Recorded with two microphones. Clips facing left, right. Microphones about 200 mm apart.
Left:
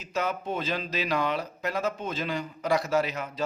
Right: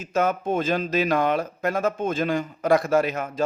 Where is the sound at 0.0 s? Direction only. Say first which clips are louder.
Right 7 dB; 50° right (ahead or behind).